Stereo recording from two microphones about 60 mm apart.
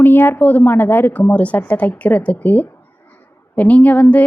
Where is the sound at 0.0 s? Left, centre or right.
Left.